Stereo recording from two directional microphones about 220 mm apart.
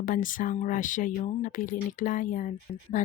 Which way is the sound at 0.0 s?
35° left (ahead or behind).